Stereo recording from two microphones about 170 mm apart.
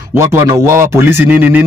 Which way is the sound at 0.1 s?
15° right (ahead or behind).